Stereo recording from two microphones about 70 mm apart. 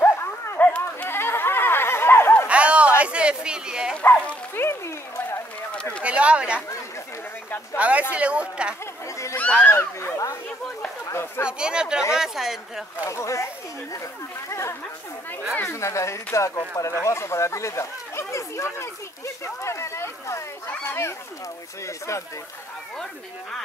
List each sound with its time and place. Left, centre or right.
0.6 s a sound: left
2.4 s a sound: centre
4.6 s a sound: left
6.0 s speech: centre
7.7 s speech: centre
9.4 s speech: left
9.7 s speech: left
11.4 s a woman's voice: centre
13.0 s speech: left
14.5 s speech: left